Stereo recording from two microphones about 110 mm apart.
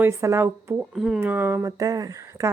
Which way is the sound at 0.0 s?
25° right (ahead or behind).